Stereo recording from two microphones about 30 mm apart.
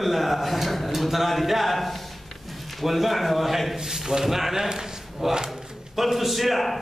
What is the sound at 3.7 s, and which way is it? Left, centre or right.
Speech, centre.